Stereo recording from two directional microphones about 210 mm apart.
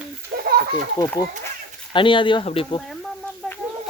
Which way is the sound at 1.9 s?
25° left (ahead or behind).